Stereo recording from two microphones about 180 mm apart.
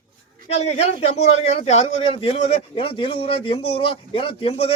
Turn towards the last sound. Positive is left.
turn(degrees=30)  # may be behind; listen again after turning